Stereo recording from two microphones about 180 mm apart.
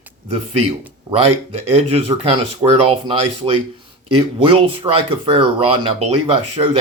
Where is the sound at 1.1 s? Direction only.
35° right (ahead or behind).